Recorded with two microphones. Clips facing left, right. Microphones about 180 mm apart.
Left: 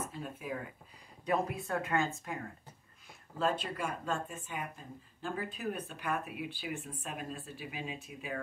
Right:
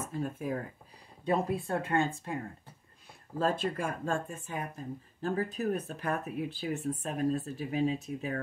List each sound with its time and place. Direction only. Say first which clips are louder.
0.1 s speech: right 6 dB; 45° right (ahead or behind)
1.2 s speech: right 3 dB; 30° right (ahead or behind)
3.3 s speech: right 3 dB; 45° right (ahead or behind)